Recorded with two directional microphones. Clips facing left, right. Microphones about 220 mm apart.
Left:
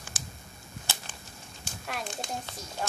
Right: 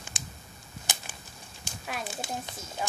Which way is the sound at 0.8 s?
15° right (ahead or behind).